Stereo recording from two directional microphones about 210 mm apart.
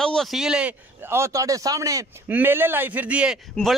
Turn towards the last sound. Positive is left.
turn(degrees=0)  # may be behind; listen again after turning